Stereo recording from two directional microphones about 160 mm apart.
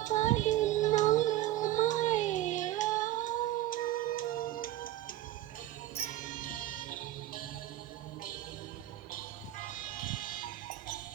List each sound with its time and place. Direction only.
0.0 s child singing: 50° left (ahead or behind)
6.1 s music: 55° left (ahead or behind)
9.1 s music: 55° left (ahead or behind)